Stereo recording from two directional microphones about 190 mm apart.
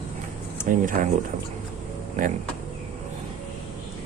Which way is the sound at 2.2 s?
45° right (ahead or behind).